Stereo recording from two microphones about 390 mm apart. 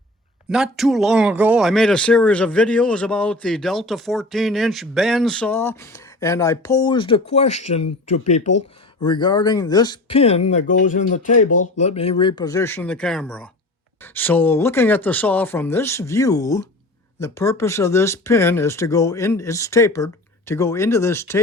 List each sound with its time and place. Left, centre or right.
0.5 s speech: centre
9.0 s speech: centre